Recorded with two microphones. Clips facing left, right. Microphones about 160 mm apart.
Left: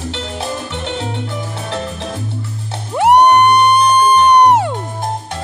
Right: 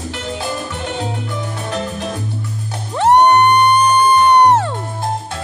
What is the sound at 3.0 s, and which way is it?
Music, 15° left (ahead or behind).